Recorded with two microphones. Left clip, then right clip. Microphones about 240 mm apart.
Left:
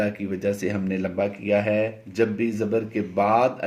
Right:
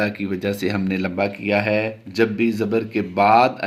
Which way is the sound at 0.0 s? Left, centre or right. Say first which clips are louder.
Right 2 dB; right.